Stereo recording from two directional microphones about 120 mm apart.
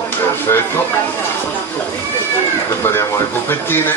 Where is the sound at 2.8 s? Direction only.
20° left (ahead or behind).